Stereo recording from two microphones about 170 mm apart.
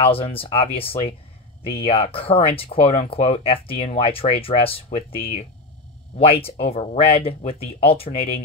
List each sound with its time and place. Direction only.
0.0 s speech: 35° left (ahead or behind)